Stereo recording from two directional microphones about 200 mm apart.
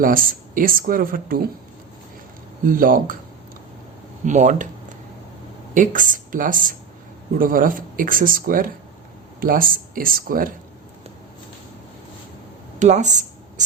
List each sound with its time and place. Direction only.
0.0 s speech: 45° right (ahead or behind)
2.6 s speech: 45° right (ahead or behind)
4.3 s speech: 35° right (ahead or behind)
12.8 s speech: 35° right (ahead or behind)